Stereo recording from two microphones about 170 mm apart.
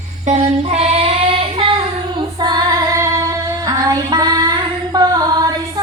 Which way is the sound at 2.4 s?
25° right (ahead or behind).